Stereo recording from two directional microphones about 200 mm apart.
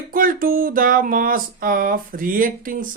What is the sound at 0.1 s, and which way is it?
Speech, 45° right (ahead or behind).